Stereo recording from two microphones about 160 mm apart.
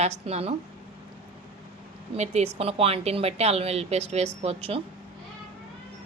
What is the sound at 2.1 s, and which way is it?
Speech, 45° right (ahead or behind).